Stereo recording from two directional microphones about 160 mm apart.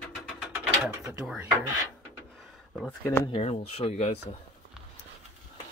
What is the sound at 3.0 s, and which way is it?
Speech, 15° left (ahead or behind).